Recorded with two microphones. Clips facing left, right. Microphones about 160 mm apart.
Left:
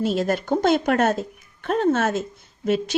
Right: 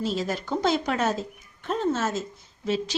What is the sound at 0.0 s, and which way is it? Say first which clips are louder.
Speech: left 6 dB; 55° left (ahead or behind).